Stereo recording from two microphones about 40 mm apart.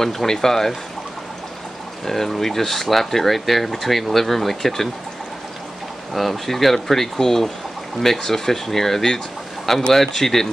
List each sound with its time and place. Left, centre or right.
0.0 s speech: centre
2.0 s speech: centre
6.1 s speech: centre